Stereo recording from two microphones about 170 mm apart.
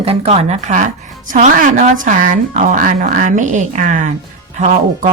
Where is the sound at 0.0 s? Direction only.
35° right (ahead or behind).